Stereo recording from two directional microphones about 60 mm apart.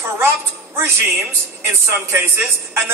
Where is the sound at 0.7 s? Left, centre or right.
Right.